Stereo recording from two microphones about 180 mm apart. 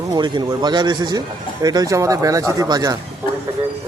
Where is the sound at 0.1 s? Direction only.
25° right (ahead or behind).